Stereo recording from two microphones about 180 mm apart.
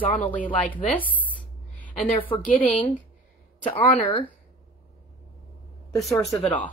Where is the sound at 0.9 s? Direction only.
10° left (ahead or behind).